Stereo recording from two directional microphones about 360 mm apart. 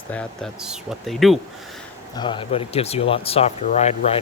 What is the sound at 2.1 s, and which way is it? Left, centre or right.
Speech, centre.